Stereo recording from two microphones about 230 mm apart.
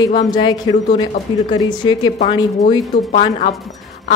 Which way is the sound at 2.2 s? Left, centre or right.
Left.